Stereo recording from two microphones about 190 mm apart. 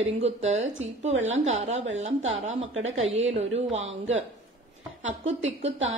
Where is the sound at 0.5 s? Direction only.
90° right.